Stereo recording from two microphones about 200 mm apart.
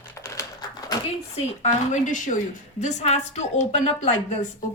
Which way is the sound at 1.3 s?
35° left (ahead or behind).